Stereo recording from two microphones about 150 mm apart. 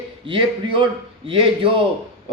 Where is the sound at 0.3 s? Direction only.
35° right (ahead or behind).